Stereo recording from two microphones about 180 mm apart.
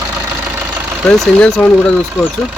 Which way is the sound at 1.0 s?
5° left (ahead or behind).